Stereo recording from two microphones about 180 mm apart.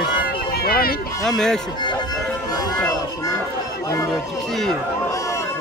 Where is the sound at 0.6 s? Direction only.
60° left (ahead or behind).